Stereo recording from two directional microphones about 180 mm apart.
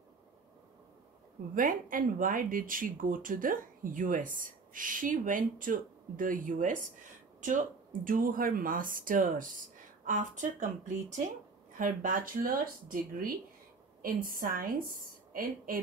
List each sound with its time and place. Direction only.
1.5 s speech: 50° right (ahead or behind)
11.8 s speech: 50° right (ahead or behind)